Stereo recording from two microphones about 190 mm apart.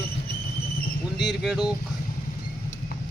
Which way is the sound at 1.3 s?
Centre (ahead or behind).